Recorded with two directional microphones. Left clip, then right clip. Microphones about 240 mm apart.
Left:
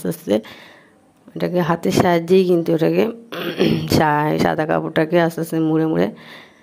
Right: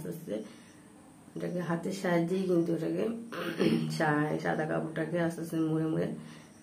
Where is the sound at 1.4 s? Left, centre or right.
Left.